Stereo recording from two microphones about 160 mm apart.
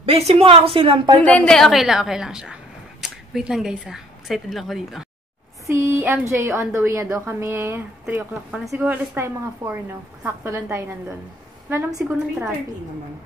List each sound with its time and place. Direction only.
0.0 s a woman's voice: 40° right (ahead or behind)
1.2 s a woman's voice: 10° left (ahead or behind)
5.7 s a woman's voice: 15° right (ahead or behind)
8.0 s a woman's voice: 5° right (ahead or behind)
12.0 s a woman's voice: 15° right (ahead or behind)